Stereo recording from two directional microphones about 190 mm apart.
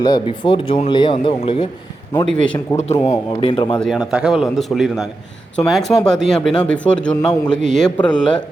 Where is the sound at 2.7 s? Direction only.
15° left (ahead or behind).